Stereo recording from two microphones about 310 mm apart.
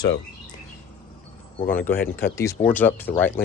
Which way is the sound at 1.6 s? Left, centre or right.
Centre.